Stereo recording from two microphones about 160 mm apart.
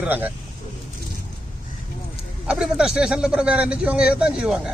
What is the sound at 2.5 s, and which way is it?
A man's voice, 5° right (ahead or behind).